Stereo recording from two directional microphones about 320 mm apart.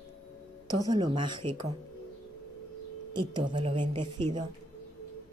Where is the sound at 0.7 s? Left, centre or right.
Centre.